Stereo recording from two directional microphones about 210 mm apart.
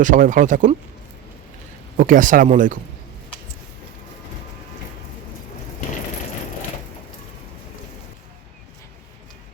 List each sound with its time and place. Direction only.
0.0 s speech: 40° right (ahead or behind)
2.0 s speech: 40° right (ahead or behind)